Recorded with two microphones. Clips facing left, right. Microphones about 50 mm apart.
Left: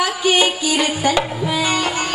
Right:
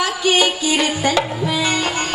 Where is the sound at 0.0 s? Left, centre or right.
Centre.